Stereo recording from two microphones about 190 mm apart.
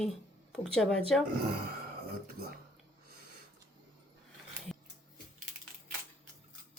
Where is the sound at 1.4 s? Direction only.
50° right (ahead or behind).